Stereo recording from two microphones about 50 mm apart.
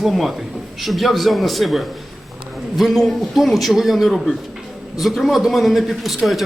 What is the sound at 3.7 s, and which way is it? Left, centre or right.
A man's voice, centre.